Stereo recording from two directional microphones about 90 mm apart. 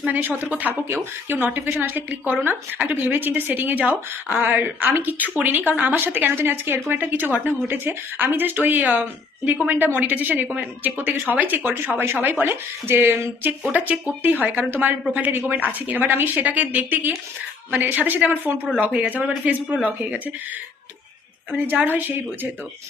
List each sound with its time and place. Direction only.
0.0 s speech: 20° right (ahead or behind)
21.7 s speech: 20° right (ahead or behind)